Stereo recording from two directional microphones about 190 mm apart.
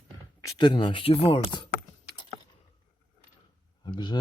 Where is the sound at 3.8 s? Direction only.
25° left (ahead or behind).